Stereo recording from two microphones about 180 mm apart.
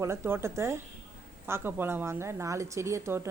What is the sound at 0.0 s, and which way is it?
A woman's voice, 15° right (ahead or behind).